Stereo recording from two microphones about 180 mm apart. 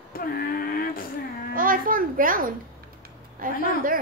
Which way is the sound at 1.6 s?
50° right (ahead or behind).